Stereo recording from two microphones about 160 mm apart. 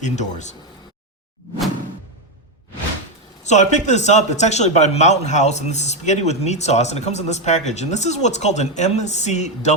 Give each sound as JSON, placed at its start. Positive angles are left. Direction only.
{"t": 0.0, "sound": "a man's voice", "side_deg": 45}
{"t": 3.4, "sound": "a man's voice", "side_deg": 45}